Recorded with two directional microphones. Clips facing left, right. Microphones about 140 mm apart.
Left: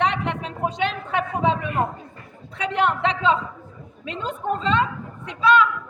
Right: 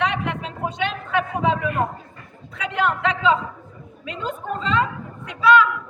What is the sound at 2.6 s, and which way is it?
A man's voice, 30° left (ahead or behind).